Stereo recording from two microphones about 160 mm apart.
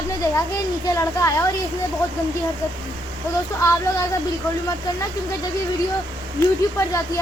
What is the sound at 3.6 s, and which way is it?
Speech, 20° left (ahead or behind).